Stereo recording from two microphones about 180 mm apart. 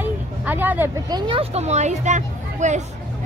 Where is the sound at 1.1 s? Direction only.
25° right (ahead or behind).